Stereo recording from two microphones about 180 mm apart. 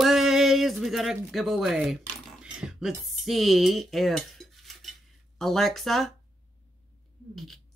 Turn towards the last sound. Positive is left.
turn(degrees=0)  # may be behind; listen again after turning